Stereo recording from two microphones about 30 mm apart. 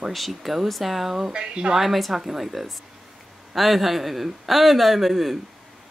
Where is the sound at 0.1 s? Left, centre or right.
Centre.